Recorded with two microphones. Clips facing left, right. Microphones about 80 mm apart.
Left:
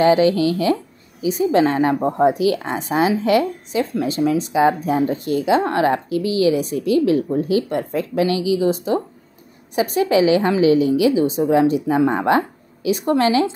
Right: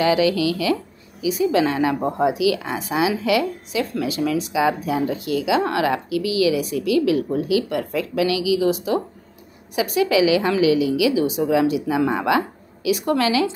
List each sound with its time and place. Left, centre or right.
0.0 s a woman's voice: left